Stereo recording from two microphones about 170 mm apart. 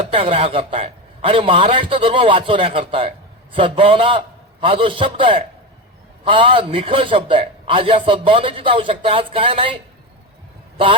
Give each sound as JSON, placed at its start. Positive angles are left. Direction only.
{"t": 0.0, "sound": "a man's voice", "side_deg": -35}